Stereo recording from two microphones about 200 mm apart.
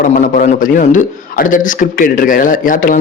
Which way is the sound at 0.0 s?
40° left (ahead or behind).